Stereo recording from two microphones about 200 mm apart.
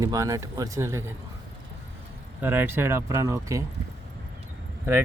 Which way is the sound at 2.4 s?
10° right (ahead or behind).